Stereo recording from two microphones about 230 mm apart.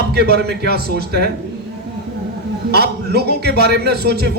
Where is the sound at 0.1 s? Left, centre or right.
Right.